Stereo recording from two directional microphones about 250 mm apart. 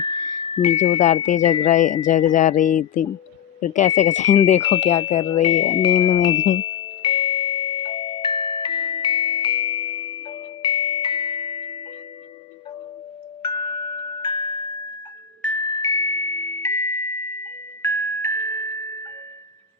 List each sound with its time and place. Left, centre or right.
0.5 s speech: left
5.6 s music: centre
13.4 s glockenspiel: centre